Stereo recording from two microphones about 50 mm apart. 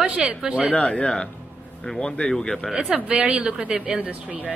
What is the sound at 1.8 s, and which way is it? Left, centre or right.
Speech, centre.